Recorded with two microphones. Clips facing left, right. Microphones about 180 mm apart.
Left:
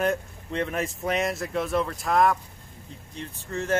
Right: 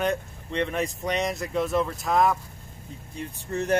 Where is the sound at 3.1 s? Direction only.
15° right (ahead or behind).